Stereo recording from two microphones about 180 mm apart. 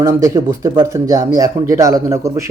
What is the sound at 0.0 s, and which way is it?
Speech, 15° right (ahead or behind).